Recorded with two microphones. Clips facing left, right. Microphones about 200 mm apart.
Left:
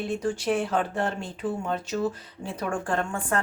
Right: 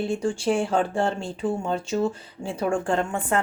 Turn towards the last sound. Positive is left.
turn(degrees=-25)  # may be behind; listen again after turning